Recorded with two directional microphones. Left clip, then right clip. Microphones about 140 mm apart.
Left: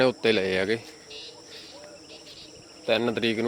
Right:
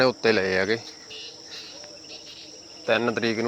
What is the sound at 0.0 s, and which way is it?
Speech, 10° left (ahead or behind).